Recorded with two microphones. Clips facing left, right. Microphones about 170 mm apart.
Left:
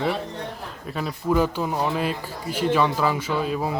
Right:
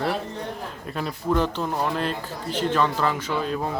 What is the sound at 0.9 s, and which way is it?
A man's voice, 5° left (ahead or behind).